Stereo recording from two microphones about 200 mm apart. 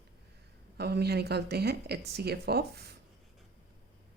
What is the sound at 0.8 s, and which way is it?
Speech, 55° right (ahead or behind).